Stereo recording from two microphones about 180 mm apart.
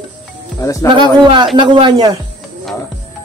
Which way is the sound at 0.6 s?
15° left (ahead or behind).